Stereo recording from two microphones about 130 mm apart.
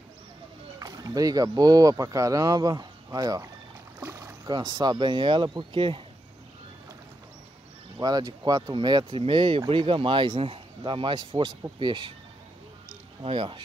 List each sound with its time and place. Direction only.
0.7 s speech: 30° right (ahead or behind)
4.0 s boat: 20° right (ahead or behind)
4.6 s speech: 30° right (ahead or behind)
8.0 s speech: 30° right (ahead or behind)
13.2 s speech: 45° right (ahead or behind)